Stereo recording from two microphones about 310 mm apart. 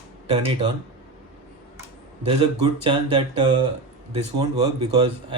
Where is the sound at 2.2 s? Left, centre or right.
Centre.